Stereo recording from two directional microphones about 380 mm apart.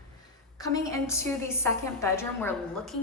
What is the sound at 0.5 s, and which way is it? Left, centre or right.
A woman's voice, centre.